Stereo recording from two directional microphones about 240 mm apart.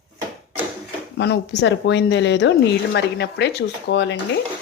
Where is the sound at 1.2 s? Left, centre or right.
Left.